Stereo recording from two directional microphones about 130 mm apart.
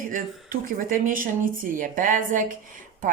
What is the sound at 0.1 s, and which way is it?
Speech, 90° right.